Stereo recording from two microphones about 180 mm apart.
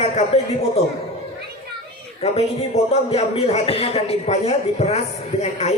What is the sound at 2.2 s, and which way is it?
A man's voice, 35° left (ahead or behind).